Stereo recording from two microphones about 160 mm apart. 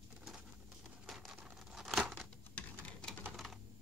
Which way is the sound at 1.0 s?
Centre (ahead or behind).